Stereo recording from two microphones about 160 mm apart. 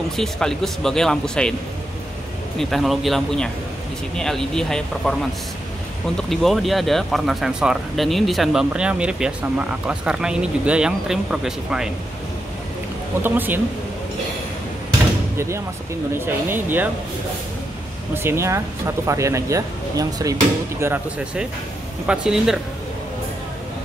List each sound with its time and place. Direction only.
0.1 s speech: centre (ahead or behind)
2.6 s speech: centre (ahead or behind)
13.2 s speech: 10° right (ahead or behind)
15.3 s speech: 15° right (ahead or behind)
18.1 s speech: 15° right (ahead or behind)
20.8 s speech: 10° right (ahead or behind)